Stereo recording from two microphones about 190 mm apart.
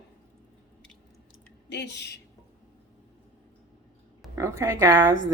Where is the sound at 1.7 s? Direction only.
65° left (ahead or behind).